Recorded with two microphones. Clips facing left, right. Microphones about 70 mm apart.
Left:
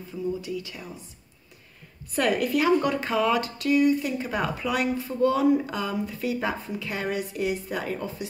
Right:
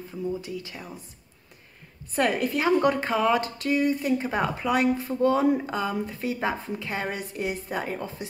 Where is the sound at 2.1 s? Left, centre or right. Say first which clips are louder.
Left 1 dB; right.